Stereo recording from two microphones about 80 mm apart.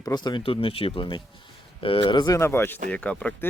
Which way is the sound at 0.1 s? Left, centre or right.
Left.